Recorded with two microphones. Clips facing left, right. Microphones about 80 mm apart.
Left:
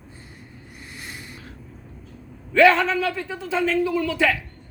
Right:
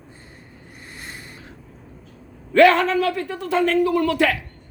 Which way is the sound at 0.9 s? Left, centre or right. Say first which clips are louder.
Even; right.